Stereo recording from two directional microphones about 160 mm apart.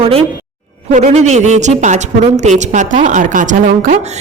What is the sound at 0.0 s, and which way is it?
A woman's voice, 35° right (ahead or behind).